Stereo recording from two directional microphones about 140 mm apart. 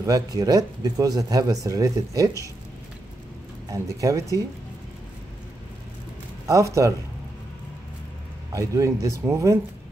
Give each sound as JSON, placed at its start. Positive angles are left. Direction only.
{"t": 0.0, "sound": "speech", "side_deg": -25}
{"t": 3.7, "sound": "speech", "side_deg": -25}
{"t": 6.4, "sound": "speech", "side_deg": -20}
{"t": 8.5, "sound": "speech", "side_deg": -20}